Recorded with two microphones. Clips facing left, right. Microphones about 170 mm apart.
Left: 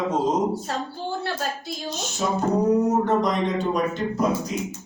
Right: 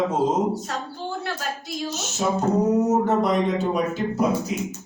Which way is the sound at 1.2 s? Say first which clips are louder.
Left 2 dB; 30° left (ahead or behind).